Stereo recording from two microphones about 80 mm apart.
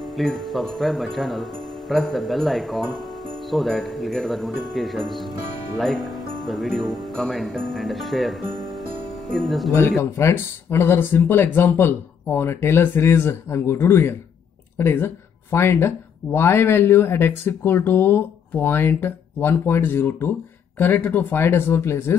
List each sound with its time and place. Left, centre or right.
0.0 s speech: centre
10.1 s speech: left